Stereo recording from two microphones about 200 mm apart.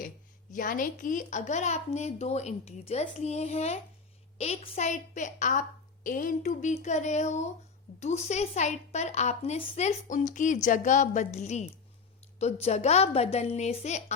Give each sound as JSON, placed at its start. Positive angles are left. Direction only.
{"t": 0.5, "sound": "a woman's voice", "side_deg": 40}